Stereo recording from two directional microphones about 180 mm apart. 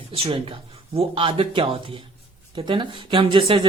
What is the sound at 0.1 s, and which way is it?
Speech, 30° right (ahead or behind).